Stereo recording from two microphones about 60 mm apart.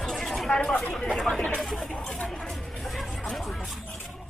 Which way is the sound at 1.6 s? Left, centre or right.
Centre.